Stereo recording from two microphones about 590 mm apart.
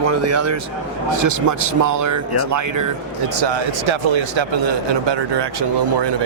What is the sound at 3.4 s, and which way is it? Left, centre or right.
Speech, right.